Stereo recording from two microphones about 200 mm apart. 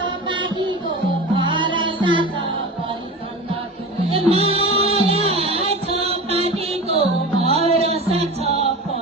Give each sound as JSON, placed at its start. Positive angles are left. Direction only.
{"t": 0.0, "sound": "music", "side_deg": -25}
{"t": 4.1, "sound": "music", "side_deg": -30}